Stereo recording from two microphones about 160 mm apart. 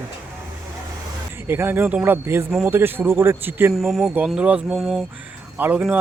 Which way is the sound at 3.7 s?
Centre (ahead or behind).